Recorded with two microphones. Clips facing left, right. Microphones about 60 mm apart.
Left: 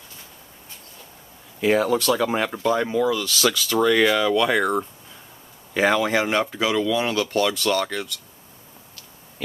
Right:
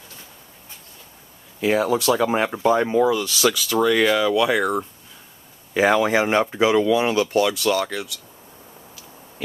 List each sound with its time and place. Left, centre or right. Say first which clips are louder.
1.6 s speech: even; centre
5.8 s speech: right 2 dB; centre